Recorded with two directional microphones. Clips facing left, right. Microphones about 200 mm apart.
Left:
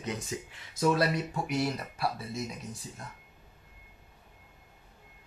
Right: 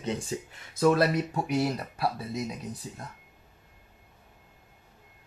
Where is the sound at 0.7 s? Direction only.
55° right (ahead or behind).